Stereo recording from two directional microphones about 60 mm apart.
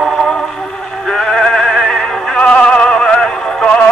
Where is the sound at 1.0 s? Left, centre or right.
Centre.